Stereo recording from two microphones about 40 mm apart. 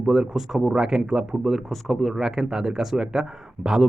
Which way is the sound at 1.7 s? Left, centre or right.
Centre.